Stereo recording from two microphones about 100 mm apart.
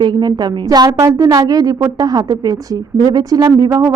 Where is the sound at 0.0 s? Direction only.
45° right (ahead or behind).